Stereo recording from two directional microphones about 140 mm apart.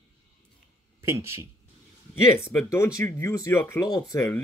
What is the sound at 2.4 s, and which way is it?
Speech, 20° left (ahead or behind).